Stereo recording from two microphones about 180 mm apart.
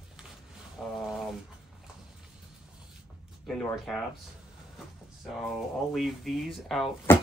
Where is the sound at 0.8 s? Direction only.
5° left (ahead or behind).